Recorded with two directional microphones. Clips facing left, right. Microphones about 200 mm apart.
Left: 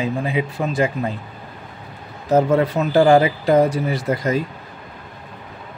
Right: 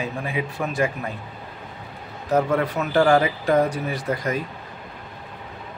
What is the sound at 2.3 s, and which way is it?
Speech, 25° left (ahead or behind).